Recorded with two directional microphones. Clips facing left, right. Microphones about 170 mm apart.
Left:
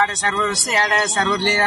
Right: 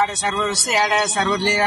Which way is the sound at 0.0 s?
5° right (ahead or behind).